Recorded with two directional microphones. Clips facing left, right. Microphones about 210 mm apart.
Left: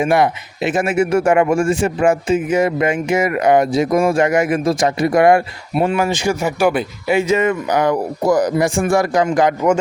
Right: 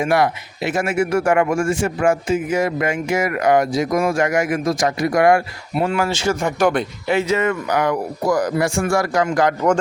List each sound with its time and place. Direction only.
0.0 s speech: 20° left (ahead or behind)